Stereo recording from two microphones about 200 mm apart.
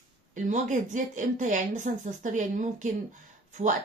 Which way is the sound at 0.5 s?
40° right (ahead or behind).